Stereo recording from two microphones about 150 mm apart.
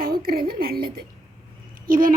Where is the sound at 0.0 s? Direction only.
80° right.